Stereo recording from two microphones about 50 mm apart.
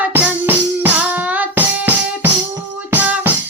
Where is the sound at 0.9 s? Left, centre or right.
Right.